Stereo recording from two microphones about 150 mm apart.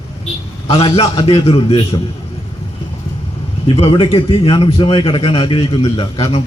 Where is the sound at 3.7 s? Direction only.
40° left (ahead or behind).